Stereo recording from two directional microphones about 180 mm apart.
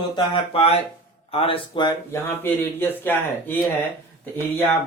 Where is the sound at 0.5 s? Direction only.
35° left (ahead or behind).